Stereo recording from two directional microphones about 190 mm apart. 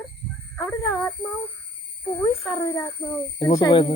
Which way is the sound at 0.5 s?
15° left (ahead or behind).